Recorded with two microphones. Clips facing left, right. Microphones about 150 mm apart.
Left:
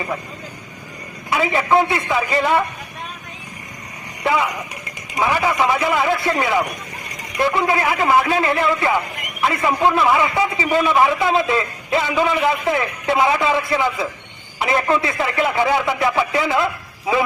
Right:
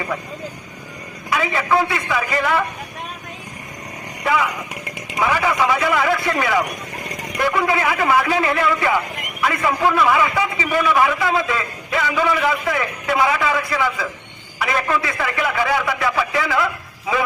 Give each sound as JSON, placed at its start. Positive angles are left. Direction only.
{"t": 1.3, "sound": "a man's voice", "side_deg": 25}
{"t": 4.2, "sound": "a man's voice", "side_deg": 25}